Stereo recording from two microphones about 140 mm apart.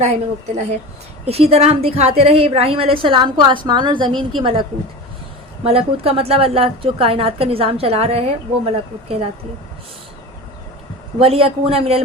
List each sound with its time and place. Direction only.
0.0 s a woman's voice: 50° right (ahead or behind); by 4.6 s 35° right (ahead or behind)
5.6 s a woman's voice: 45° right (ahead or behind)
11.2 s a woman's voice: 45° right (ahead or behind)